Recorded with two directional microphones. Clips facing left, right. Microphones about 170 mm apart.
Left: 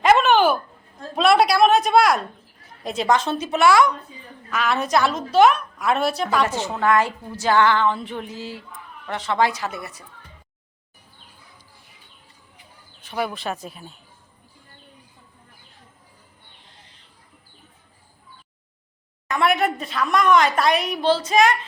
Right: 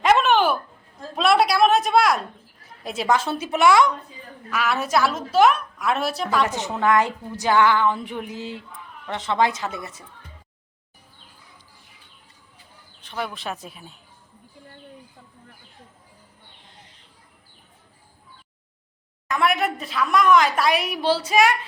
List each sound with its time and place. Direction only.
0.0 s a sound: centre (ahead or behind)
2.8 s speech: 5° right (ahead or behind); by 3.9 s 20° right (ahead or behind)
4.5 s a woman's voice: 5° right (ahead or behind)
6.7 s speech: 15° right (ahead or behind)
13.0 s a woman's voice: 5° left (ahead or behind)
19.3 s a woman's voice: centre (ahead or behind)